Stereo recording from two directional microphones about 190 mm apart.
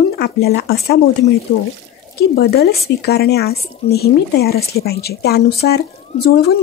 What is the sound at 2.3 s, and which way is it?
Speech, 55° left (ahead or behind).